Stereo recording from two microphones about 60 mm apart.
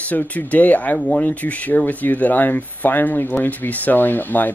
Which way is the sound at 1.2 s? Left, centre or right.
Left.